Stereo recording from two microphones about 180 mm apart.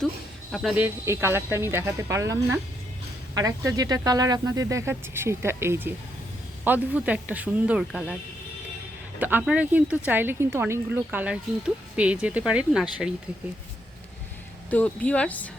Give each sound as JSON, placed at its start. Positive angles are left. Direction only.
{"t": 0.5, "sound": "speech", "side_deg": 0}
{"t": 9.1, "sound": "speech", "side_deg": -10}
{"t": 14.7, "sound": "speech", "side_deg": 10}